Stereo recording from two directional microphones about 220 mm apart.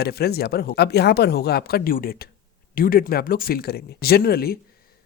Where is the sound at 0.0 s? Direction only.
45° left (ahead or behind).